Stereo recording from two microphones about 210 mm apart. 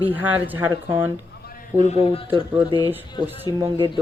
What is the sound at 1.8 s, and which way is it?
Speech, 35° left (ahead or behind).